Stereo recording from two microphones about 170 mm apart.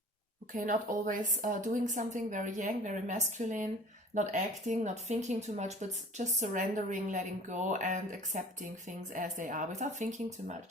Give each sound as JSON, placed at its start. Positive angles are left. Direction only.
{"t": 0.5, "sound": "a woman's voice", "side_deg": -50}